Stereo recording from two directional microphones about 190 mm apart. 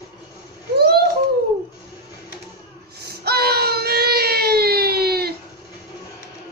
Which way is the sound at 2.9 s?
55° right (ahead or behind).